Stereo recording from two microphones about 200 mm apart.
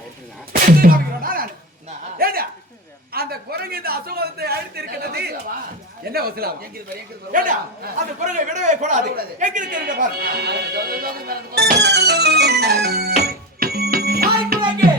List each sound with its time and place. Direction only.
0.8 s a man's voice: 45° right (ahead or behind)
13.2 s music: 50° right (ahead or behind)